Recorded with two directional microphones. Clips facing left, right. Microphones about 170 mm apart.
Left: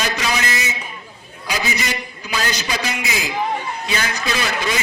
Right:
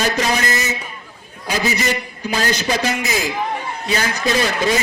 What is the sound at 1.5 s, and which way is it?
A man's voice, 45° right (ahead or behind).